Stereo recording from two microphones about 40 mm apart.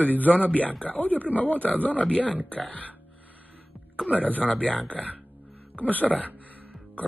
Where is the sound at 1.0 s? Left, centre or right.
Left.